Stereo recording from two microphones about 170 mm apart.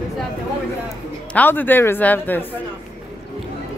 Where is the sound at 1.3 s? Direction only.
10° left (ahead or behind).